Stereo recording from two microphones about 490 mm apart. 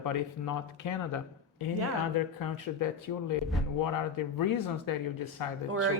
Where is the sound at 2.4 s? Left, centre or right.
Left.